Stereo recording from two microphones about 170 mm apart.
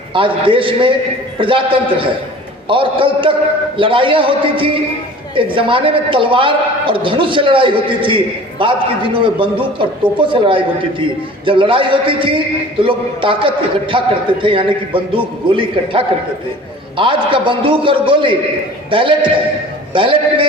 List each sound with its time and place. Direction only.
0.1 s a man's voice: 30° right (ahead or behind)